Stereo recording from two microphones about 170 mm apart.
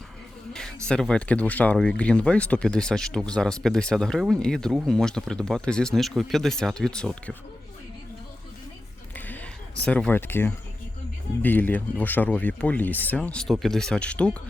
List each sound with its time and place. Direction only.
0.9 s speech: 5° left (ahead or behind)
9.1 s a sound: 10° left (ahead or behind)
9.8 s speech: 5° left (ahead or behind)